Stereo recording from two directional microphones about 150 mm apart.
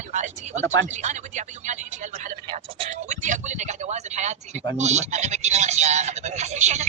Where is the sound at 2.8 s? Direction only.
55° right (ahead or behind).